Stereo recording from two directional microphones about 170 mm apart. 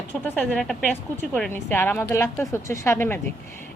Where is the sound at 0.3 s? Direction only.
10° left (ahead or behind).